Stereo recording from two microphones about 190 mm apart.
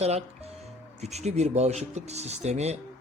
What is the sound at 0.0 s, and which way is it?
Speech, 35° right (ahead or behind).